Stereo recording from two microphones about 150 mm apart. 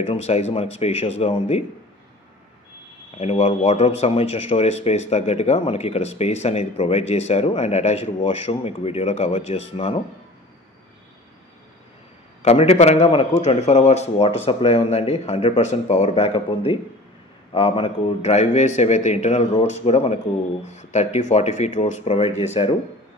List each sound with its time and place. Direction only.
0.0 s speech: 40° left (ahead or behind)
3.2 s speech: 45° left (ahead or behind)
12.4 s speech: 45° left (ahead or behind)